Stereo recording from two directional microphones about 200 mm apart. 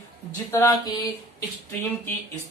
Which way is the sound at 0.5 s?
15° left (ahead or behind).